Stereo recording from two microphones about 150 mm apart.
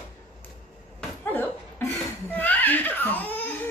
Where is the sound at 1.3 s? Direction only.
10° left (ahead or behind).